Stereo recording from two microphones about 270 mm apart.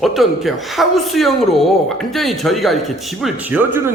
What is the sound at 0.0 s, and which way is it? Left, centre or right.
A woman's voice, centre.